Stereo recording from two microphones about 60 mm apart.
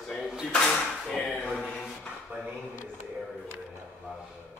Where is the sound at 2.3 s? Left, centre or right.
Right.